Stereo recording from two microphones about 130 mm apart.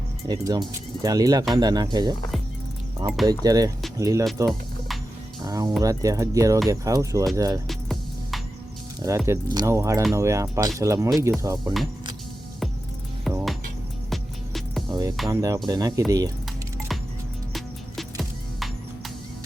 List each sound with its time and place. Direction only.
0.3 s speech: 30° right (ahead or behind)
3.2 s speech: 30° right (ahead or behind)
5.5 s speech: 30° right (ahead or behind)
7.7 s music: centre (ahead or behind)
9.0 s speech: 25° right (ahead or behind)
11.6 s speech: centre (ahead or behind)
13.2 s music: centre (ahead or behind)
14.8 s music: 30° right (ahead or behind)
15.3 s speech: 25° right (ahead or behind)
17.5 s music: centre (ahead or behind)